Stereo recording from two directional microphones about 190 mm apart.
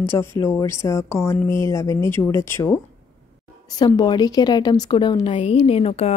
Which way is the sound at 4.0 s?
20° left (ahead or behind).